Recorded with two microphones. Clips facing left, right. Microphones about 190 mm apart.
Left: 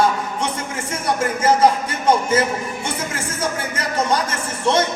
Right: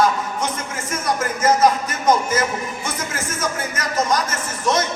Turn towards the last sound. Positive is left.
turn(degrees=30)  # may be behind; listen again after turning